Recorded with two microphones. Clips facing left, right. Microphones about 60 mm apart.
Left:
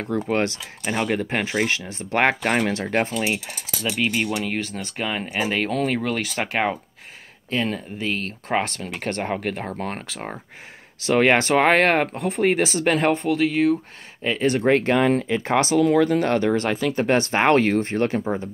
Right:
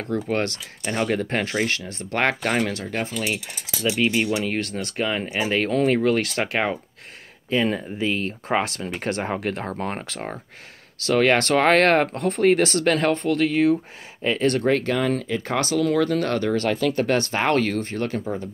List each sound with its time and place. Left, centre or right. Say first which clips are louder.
0.3 s speech: left 2 dB; centre
2.7 s speech: left 5 dB; left
3.1 s speech: left 2 dB; left
4.1 s speech: right 1 dB; centre
8.2 s speech: right 1 dB; centre
11.0 s speech: left 1 dB; centre
13.2 s speech: even; centre
14.4 s speech: left 1 dB; centre
14.7 s speech: left 3 dB; left